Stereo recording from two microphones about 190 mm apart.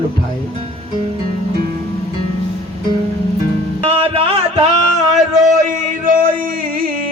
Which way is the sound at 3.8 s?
30° right (ahead or behind).